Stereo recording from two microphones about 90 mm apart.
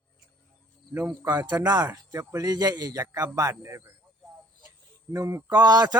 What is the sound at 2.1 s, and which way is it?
A man's voice, 40° right (ahead or behind).